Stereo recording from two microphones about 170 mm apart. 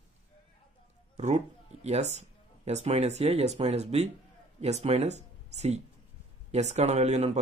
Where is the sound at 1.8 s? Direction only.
40° right (ahead or behind).